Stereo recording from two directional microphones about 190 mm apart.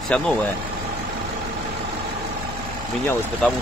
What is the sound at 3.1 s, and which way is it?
Speech, 5° left (ahead or behind).